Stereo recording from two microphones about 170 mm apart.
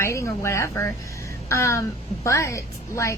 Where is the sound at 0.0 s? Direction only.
15° left (ahead or behind).